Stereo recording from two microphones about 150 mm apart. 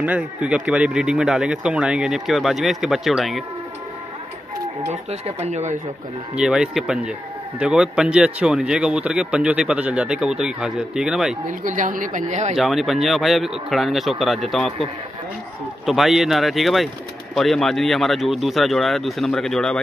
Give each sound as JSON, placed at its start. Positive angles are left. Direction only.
{"t": 0.0, "sound": "speech", "side_deg": -10}
{"t": 5.2, "sound": "speech", "side_deg": -50}
{"t": 6.3, "sound": "speech", "side_deg": -5}
{"t": 11.4, "sound": "a woman's voice", "side_deg": -60}
{"t": 12.5, "sound": "speech", "side_deg": 0}